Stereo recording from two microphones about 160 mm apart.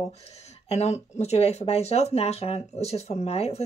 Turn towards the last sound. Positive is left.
turn(degrees=40)  # may be behind; listen again after turning